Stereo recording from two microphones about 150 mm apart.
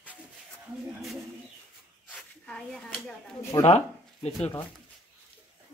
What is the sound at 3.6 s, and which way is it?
Speech, 45° left (ahead or behind).